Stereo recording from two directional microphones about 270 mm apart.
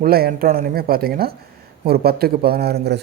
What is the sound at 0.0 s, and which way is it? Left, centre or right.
A man's voice, right.